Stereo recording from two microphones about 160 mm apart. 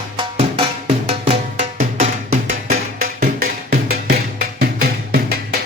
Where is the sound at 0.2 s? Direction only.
35° right (ahead or behind).